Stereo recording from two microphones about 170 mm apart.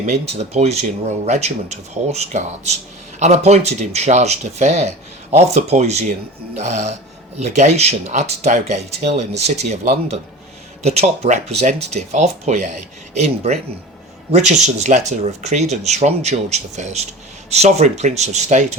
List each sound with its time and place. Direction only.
0.5 s speech: 40° right (ahead or behind)